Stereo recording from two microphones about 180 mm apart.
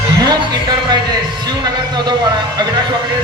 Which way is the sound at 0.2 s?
20° right (ahead or behind).